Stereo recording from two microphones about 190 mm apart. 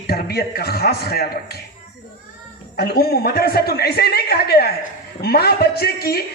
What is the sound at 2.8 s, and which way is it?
Speech, 55° left (ahead or behind).